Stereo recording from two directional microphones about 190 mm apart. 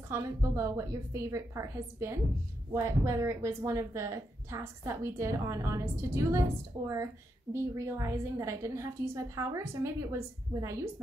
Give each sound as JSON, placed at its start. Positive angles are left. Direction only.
{"t": 0.1, "sound": "a woman's voice", "side_deg": -15}